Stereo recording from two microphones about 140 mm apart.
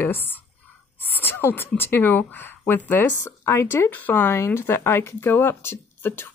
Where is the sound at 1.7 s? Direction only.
15° left (ahead or behind).